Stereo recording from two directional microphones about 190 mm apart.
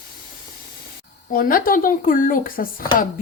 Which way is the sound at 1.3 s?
45° left (ahead or behind).